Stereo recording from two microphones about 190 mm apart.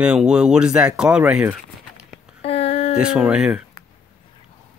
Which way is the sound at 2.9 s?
5° right (ahead or behind).